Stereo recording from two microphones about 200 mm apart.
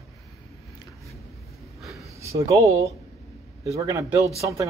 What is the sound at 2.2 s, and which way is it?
Speech, 15° right (ahead or behind).